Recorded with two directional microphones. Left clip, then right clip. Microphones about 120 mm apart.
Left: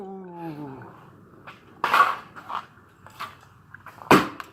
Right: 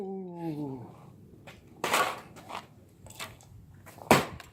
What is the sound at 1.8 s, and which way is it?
Crushing, centre (ahead or behind).